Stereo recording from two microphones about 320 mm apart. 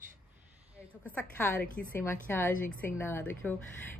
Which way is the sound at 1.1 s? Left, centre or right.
Centre.